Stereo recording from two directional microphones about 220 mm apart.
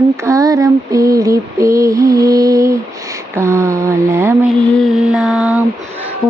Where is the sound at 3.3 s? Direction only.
10° right (ahead or behind).